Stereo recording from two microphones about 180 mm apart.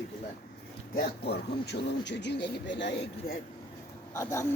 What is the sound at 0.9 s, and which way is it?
A man's voice, 65° left (ahead or behind).